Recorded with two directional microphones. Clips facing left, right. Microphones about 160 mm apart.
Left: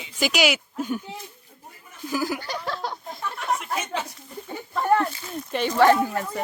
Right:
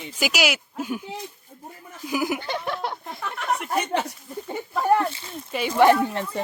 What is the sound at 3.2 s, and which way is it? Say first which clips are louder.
Speech: even; 60° right (ahead or behind).